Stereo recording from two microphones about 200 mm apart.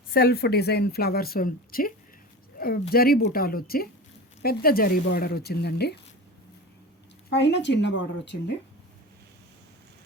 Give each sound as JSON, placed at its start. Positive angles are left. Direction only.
{"t": 0.1, "sound": "a woman's voice", "side_deg": 50}
{"t": 7.3, "sound": "a woman's voice", "side_deg": 60}